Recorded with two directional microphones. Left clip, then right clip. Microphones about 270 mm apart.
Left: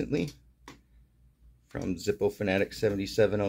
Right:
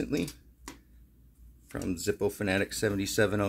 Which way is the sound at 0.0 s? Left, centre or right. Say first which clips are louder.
Left 1 dB; centre.